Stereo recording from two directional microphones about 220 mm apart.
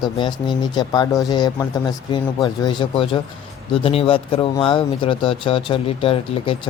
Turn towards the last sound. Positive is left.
turn(degrees=25)  # may be behind; listen again after turning